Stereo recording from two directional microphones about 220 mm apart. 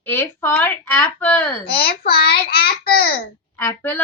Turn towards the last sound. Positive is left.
turn(degrees=10)  # may be behind; listen again after turning